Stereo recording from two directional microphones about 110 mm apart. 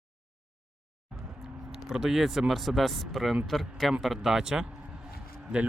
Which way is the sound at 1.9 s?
5° right (ahead or behind).